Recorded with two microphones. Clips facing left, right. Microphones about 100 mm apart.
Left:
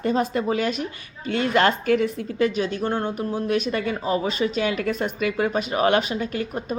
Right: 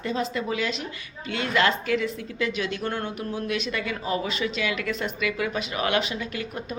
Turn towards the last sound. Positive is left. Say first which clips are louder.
# left 5 dB
turn(degrees=40)  # may be behind; listen again after turning